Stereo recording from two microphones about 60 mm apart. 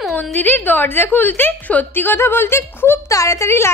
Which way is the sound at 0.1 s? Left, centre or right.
Left.